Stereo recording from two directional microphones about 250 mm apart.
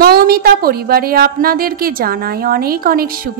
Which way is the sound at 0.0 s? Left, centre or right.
Right.